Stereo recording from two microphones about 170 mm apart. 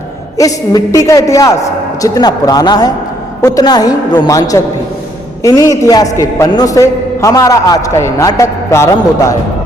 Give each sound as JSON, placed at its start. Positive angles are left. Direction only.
{"t": 0.3, "sound": "a man's voice", "side_deg": 20}